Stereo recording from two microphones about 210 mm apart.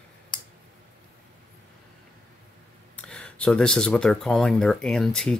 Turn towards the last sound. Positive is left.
turn(degrees=5)  # may be behind; listen again after turning